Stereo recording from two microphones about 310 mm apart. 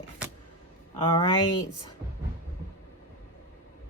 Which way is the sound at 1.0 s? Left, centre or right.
Centre.